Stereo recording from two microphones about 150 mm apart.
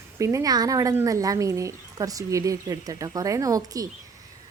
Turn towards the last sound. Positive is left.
turn(degrees=-20)  # may be behind; listen again after turning